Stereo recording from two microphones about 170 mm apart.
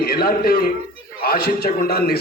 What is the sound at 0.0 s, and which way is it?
A man's voice, 65° left (ahead or behind).